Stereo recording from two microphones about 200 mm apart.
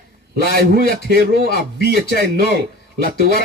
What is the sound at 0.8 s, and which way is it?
A man's voice, 50° right (ahead or behind).